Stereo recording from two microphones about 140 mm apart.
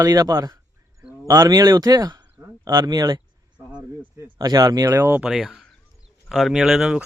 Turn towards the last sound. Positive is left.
turn(degrees=0)  # may be behind; listen again after turning